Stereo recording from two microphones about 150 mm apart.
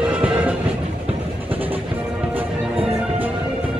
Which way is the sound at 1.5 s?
40° right (ahead or behind).